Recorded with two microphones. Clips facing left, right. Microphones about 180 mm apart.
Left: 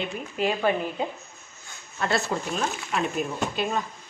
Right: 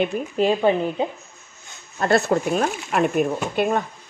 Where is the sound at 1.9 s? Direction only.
50° right (ahead or behind).